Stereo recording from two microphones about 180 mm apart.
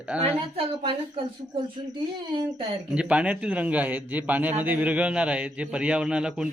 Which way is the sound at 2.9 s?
5° right (ahead or behind).